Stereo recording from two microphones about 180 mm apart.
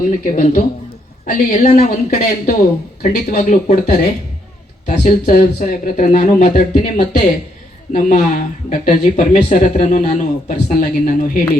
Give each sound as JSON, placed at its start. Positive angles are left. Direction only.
{"t": 0.3, "sound": "speech", "side_deg": 45}
{"t": 2.0, "sound": "speech", "side_deg": 50}